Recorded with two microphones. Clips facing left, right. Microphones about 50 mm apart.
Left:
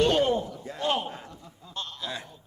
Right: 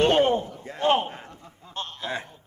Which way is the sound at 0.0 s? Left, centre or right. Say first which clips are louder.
Right 3 dB; right.